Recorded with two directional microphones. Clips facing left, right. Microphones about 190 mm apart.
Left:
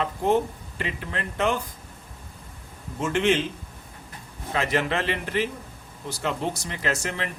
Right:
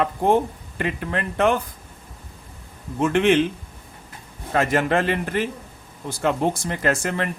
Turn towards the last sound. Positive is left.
turn(degrees=-50)  # may be behind; listen again after turning